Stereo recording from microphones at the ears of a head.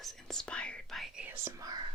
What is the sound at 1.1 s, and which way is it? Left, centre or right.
Speech, right.